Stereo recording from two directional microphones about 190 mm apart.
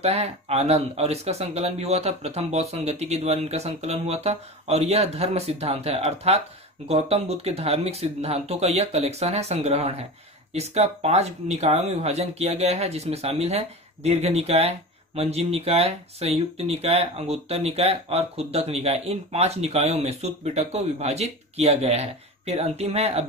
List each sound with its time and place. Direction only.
0.0 s speech: 35° right (ahead or behind)